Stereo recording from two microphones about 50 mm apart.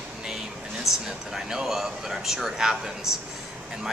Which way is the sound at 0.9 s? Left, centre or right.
Left.